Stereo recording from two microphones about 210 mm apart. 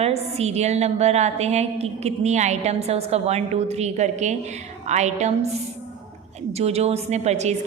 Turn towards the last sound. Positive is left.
turn(degrees=-30)  # may be behind; listen again after turning